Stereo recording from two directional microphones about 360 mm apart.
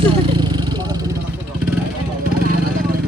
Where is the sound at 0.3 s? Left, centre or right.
Centre.